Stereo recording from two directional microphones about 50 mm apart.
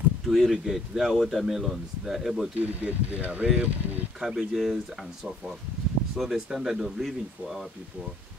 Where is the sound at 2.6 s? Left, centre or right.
Right.